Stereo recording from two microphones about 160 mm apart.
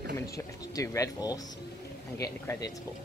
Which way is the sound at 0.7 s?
20° left (ahead or behind).